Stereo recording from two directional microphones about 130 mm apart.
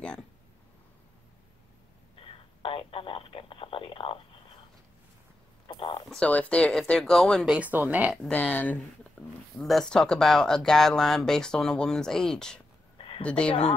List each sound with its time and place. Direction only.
2.1 s telephone: 45° left (ahead or behind)
5.7 s a sound: 40° left (ahead or behind)
6.0 s speech: 10° left (ahead or behind)
7.4 s speech: 10° right (ahead or behind)
8.1 s speech: 5° left (ahead or behind)
9.2 s a sound: 10° left (ahead or behind)
9.6 s speech: centre (ahead or behind)
12.9 s a sound: 45° left (ahead or behind)
13.2 s speech: 10° left (ahead or behind)